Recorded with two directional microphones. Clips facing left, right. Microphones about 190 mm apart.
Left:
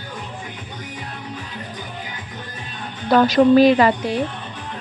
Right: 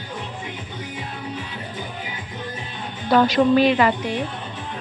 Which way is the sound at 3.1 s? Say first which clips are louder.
Left 3 dB; 40° left (ahead or behind).